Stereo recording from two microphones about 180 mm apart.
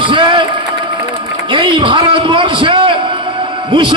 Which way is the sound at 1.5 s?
25° right (ahead or behind).